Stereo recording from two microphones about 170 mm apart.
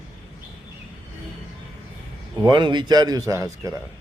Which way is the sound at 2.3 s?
25° right (ahead or behind).